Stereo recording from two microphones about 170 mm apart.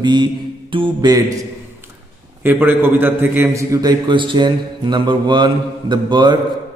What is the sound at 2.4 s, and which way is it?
A man's voice, 10° right (ahead or behind).